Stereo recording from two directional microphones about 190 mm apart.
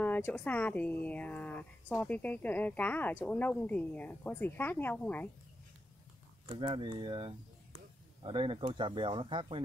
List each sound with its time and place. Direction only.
0.0 s speech: 10° left (ahead or behind)
6.5 s speech: 25° right (ahead or behind)